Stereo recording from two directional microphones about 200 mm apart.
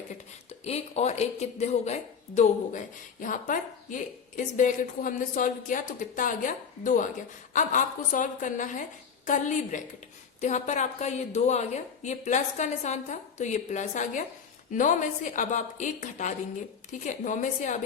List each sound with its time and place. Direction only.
0.6 s speech: 30° left (ahead or behind)